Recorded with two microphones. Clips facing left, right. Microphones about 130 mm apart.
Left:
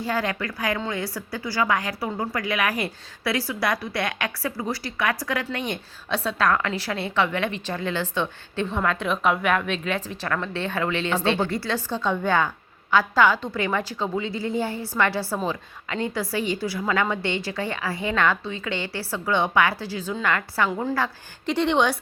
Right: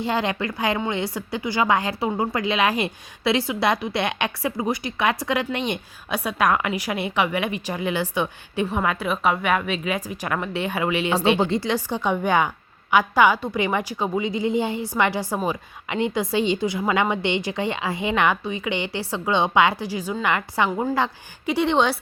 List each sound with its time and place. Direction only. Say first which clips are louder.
0.0 s a woman's voice: right 2 dB; 25° right (ahead or behind)
21.4 s speech: right 1 dB; 10° right (ahead or behind)